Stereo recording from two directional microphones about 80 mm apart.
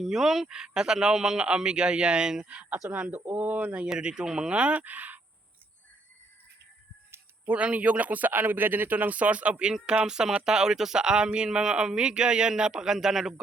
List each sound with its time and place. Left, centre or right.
0.0 s speech: centre; by 5.2 s right
7.1 s speech: right; by 13.3 s centre